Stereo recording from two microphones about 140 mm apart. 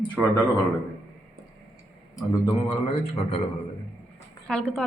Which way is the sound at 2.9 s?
45° left (ahead or behind).